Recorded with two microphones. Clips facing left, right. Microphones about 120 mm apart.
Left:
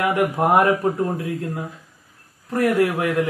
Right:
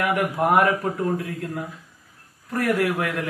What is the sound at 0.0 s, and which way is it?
Speech, 20° left (ahead or behind).